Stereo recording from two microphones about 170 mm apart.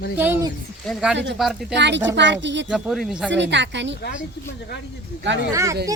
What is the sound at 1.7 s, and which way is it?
Speech, 90° right.